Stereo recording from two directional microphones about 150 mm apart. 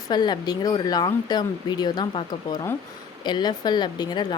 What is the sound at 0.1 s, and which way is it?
Speech, 30° left (ahead or behind).